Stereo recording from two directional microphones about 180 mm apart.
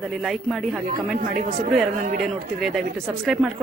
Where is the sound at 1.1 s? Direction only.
45° right (ahead or behind).